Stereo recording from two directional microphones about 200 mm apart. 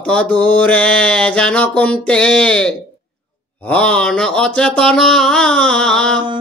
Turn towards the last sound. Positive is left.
turn(degrees=5)  # may be behind; listen again after turning